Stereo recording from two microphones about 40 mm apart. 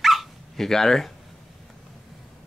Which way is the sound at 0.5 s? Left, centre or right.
Centre.